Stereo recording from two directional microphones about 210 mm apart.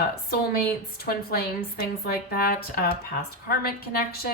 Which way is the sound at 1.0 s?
50° left (ahead or behind).